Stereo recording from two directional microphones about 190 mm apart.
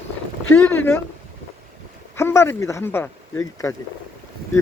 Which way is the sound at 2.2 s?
15° left (ahead or behind).